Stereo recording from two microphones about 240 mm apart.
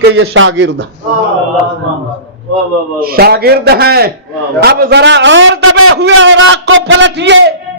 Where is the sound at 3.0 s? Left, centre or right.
Right.